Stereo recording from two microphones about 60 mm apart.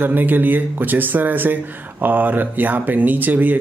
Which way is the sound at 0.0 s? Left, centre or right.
Right.